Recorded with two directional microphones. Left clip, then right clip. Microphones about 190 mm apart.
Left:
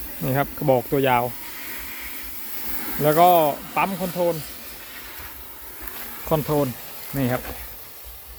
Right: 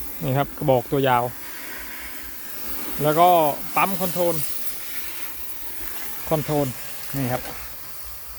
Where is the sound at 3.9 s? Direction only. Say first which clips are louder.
Even; 65° right (ahead or behind).